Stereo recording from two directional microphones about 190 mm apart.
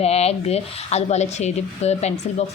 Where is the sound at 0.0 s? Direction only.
35° left (ahead or behind).